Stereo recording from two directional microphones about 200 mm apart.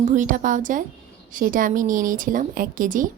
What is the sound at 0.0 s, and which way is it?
Speech, 40° right (ahead or behind).